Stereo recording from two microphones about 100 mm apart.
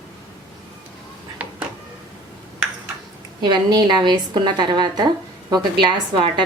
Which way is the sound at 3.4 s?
45° right (ahead or behind).